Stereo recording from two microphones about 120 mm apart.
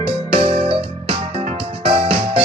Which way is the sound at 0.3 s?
55° right (ahead or behind).